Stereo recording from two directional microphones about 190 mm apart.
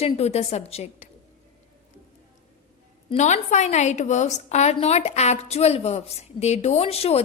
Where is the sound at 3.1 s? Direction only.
40° left (ahead or behind).